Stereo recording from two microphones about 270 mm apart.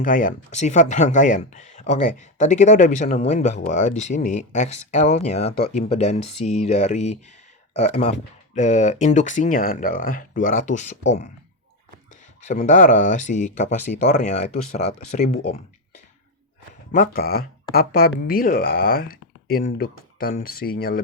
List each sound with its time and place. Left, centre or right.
0.0 s speech: left
5.5 s speech: left
12.4 s speech: left
17.2 s speech: left